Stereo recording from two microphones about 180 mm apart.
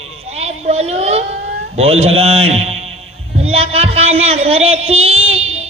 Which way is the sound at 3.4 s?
35° right (ahead or behind).